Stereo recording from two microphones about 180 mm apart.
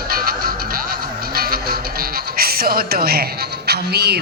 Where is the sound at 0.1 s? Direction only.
55° right (ahead or behind).